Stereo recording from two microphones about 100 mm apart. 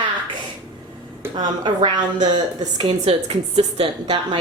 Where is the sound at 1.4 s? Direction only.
50° right (ahead or behind).